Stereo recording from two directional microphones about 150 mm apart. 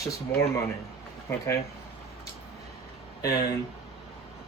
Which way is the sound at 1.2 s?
20° left (ahead or behind).